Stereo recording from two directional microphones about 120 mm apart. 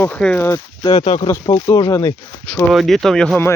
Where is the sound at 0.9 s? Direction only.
40° left (ahead or behind); by 2.1 s 25° left (ahead or behind).